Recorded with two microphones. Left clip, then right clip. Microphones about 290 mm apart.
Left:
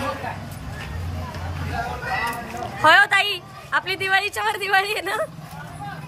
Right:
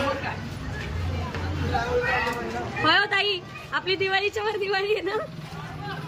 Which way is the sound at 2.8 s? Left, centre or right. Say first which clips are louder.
Left 7 dB; centre.